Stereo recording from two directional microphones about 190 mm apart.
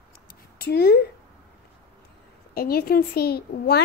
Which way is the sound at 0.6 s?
55° left (ahead or behind).